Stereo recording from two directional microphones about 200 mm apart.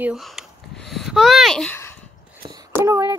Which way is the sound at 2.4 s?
20° right (ahead or behind).